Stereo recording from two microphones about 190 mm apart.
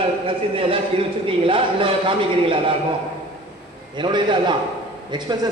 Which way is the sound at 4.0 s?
25° right (ahead or behind).